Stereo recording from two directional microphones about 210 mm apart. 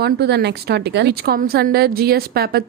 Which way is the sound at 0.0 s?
50° right (ahead or behind).